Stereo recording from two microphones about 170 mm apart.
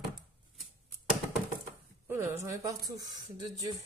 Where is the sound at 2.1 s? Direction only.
15° right (ahead or behind).